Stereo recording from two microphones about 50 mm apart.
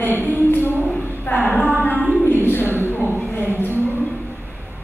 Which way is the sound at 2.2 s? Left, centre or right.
Left.